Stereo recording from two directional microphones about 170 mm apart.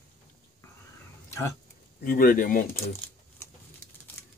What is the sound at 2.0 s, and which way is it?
Speech, 55° left (ahead or behind).